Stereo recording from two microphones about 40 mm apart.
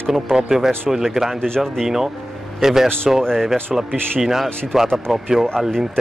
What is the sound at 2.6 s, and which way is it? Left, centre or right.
Speech, centre.